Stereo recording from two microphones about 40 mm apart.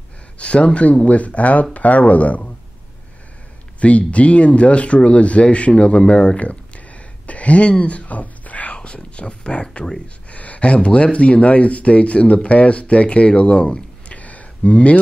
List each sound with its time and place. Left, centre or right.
0.4 s speech: left
3.8 s speech: left
5.8 s a sound: left
8.7 s speech: left